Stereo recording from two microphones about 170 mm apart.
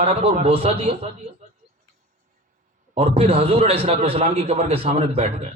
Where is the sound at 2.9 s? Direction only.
35° right (ahead or behind).